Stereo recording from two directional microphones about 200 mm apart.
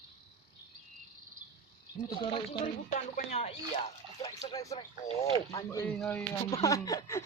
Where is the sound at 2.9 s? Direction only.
40° left (ahead or behind).